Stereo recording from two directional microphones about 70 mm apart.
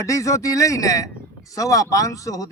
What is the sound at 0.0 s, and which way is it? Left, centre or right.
Speech, left.